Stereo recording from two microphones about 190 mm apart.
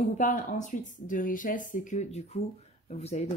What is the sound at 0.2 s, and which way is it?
Speech, 40° left (ahead or behind).